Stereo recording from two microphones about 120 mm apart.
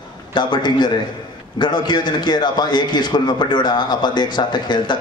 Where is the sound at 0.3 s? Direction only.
40° left (ahead or behind).